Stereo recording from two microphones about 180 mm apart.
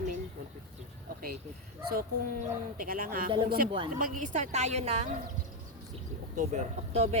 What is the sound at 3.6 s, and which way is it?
Speech, 30° right (ahead or behind).